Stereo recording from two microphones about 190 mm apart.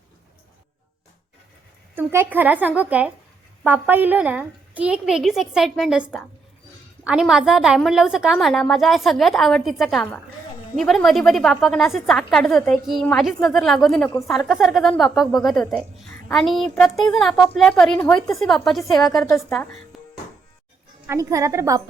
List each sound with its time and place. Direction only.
2.0 s a woman's voice: 10° right (ahead or behind)
21.1 s a woman's voice: 15° right (ahead or behind)